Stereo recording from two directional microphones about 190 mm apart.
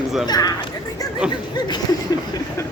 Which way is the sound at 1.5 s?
20° left (ahead or behind).